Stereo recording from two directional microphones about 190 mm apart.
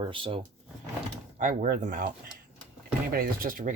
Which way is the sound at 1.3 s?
45° right (ahead or behind).